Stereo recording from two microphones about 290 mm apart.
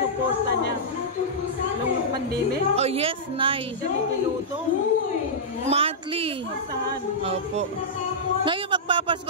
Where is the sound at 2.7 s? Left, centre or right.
Right.